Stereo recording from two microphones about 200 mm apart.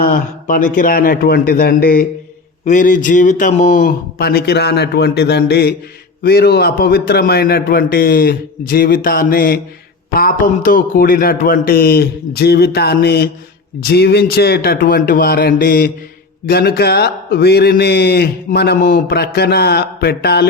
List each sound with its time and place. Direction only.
0.0 s speech: 45° left (ahead or behind)